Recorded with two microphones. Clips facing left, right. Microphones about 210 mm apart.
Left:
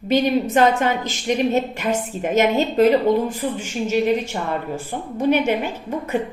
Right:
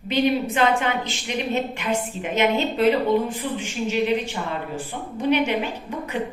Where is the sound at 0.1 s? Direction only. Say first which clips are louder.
Left 3 dB; 45° left (ahead or behind).